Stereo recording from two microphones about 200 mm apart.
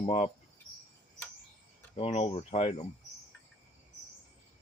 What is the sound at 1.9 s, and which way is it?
Speech, 30° left (ahead or behind).